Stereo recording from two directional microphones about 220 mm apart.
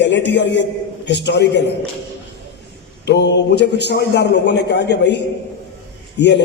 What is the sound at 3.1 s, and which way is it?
A man's voice, 50° left (ahead or behind).